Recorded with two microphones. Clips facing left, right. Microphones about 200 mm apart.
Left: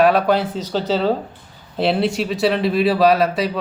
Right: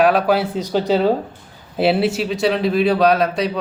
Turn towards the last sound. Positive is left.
turn(degrees=0)  # may be behind; listen again after turning